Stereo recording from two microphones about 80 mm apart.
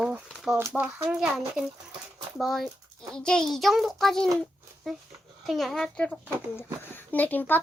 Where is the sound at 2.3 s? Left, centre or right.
Centre.